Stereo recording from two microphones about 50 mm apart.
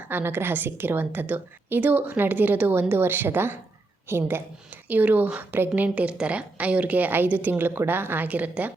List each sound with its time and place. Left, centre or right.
0.1 s a woman's voice: right
4.9 s a woman's voice: right